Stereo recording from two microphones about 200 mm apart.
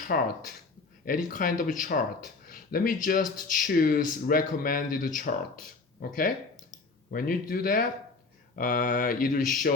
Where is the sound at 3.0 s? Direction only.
40° left (ahead or behind).